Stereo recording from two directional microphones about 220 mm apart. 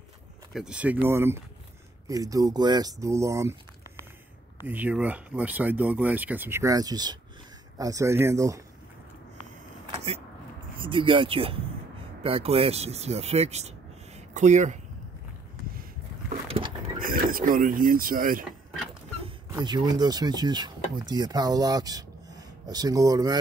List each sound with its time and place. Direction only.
0.5 s speech: 5° right (ahead or behind)
9.8 s vehicle: 30° right (ahead or behind)
10.8 s speech: 25° right (ahead or behind)
16.4 s patter: 25° right (ahead or behind)
17.0 s speech: 40° right (ahead or behind)
19.6 s speech: 20° right (ahead or behind)